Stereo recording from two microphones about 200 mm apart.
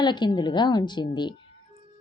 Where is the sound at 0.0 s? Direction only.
20° left (ahead or behind).